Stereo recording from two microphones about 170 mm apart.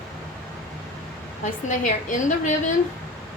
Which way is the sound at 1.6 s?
50° left (ahead or behind).